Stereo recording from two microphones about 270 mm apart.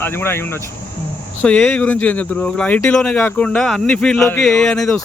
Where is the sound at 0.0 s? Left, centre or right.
Centre.